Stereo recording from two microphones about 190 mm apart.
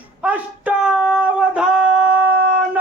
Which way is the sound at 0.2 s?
5° right (ahead or behind).